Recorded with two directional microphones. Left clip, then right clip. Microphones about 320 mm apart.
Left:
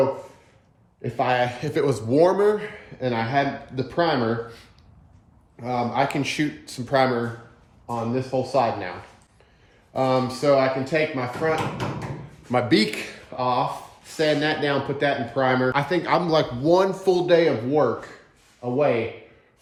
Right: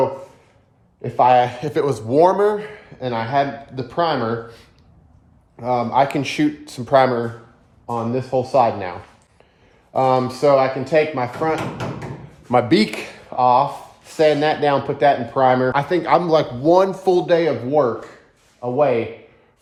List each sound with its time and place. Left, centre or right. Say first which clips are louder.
1.0 s speech: right 8 dB; centre
5.5 s speech: right 6 dB; right
9.9 s speech: right 5 dB; centre